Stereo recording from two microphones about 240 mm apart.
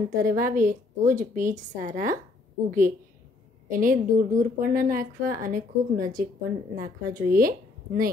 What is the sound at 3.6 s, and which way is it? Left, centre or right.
A woman's voice, right.